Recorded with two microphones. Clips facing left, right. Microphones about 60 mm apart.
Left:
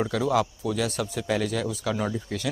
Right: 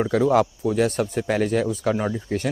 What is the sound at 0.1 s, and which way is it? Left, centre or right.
Speech, right.